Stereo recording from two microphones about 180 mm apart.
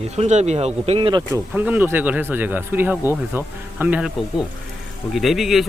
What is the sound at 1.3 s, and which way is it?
Speech, 10° right (ahead or behind).